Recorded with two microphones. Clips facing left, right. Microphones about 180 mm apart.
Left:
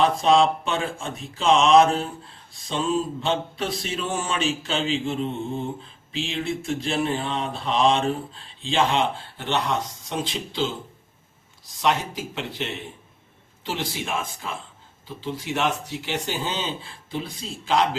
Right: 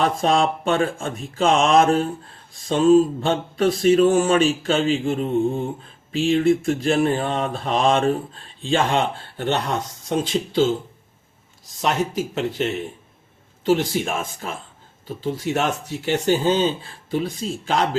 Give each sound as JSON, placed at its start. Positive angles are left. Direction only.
{"t": 0.0, "sound": "mantra", "side_deg": -45}
{"t": 11.8, "sound": "mantra", "side_deg": -45}
{"t": 13.7, "sound": "mantra", "side_deg": -45}